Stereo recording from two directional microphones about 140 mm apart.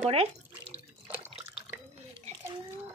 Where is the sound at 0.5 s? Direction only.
10° right (ahead or behind).